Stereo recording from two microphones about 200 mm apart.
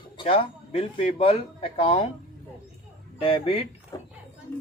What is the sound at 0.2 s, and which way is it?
Speech, 25° left (ahead or behind).